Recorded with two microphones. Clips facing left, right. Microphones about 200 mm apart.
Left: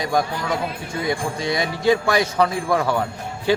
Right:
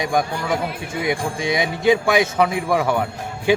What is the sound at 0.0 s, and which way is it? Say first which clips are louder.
A man's voice: right 1 dB; 20° right (ahead or behind).